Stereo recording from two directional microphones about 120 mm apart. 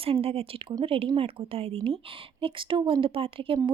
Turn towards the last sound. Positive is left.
turn(degrees=-50)  # may be behind; listen again after turning